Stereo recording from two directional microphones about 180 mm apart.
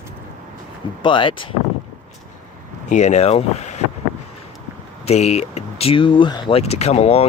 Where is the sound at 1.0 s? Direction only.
25° left (ahead or behind).